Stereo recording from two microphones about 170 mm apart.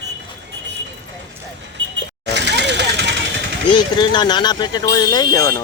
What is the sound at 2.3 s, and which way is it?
Vehicle, 90° right.